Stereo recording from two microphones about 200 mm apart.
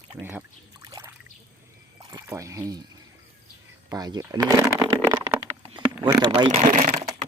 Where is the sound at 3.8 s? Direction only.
20° right (ahead or behind).